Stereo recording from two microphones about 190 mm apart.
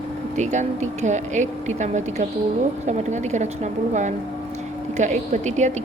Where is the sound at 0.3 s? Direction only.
40° right (ahead or behind).